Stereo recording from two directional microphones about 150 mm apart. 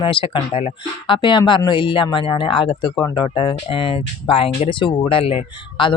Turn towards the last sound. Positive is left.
turn(degrees=35)  # may be behind; listen again after turning